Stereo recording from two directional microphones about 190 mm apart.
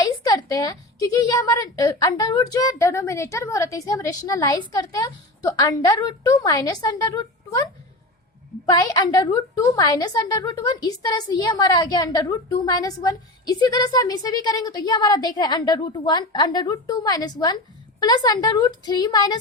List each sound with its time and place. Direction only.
0.0 s a woman's voice: 20° left (ahead or behind)
8.7 s a woman's voice: 20° left (ahead or behind)